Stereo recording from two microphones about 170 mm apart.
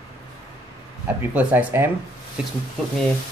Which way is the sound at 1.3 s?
10° right (ahead or behind).